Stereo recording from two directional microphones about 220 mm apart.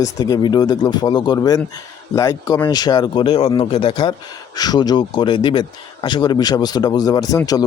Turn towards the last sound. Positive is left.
turn(degrees=15)  # may be behind; listen again after turning